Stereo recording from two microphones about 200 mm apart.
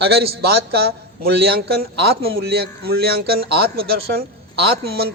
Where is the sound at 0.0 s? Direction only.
55° right (ahead or behind).